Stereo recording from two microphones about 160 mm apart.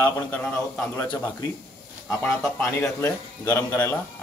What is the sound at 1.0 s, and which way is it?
Speech, 25° left (ahead or behind).